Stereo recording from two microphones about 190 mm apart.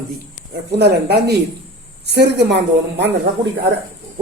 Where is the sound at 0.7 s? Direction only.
60° right (ahead or behind).